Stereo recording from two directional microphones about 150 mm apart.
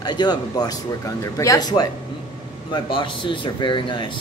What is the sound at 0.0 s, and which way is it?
Speech, 30° left (ahead or behind).